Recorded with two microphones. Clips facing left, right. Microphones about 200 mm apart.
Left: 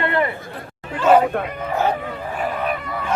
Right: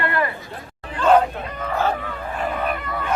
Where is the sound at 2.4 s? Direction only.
Centre (ahead or behind).